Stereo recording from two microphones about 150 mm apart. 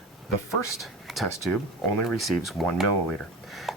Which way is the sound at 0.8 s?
Centre (ahead or behind).